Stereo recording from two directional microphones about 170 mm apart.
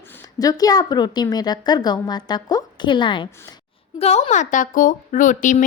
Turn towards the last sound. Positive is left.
turn(degrees=50)  # may be behind; listen again after turning